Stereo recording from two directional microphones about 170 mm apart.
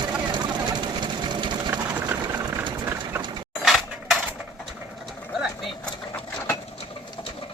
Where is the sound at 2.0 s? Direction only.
10° right (ahead or behind).